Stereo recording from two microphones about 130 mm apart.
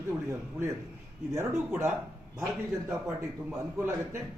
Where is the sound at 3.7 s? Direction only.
20° right (ahead or behind).